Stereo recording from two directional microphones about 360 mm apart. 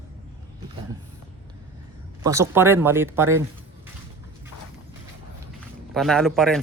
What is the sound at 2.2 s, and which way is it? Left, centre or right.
Speech, centre.